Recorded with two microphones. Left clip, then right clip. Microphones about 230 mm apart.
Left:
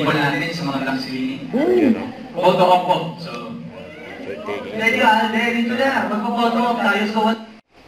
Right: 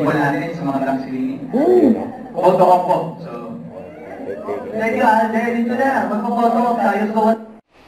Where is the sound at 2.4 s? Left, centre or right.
Centre.